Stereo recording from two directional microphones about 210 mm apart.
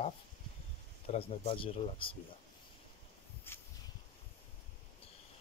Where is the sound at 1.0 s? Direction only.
30° left (ahead or behind).